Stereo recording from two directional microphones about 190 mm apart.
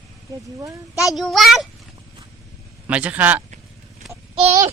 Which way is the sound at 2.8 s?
5° right (ahead or behind).